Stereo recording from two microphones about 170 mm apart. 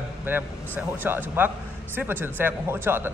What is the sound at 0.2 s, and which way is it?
A man's voice, 10° right (ahead or behind).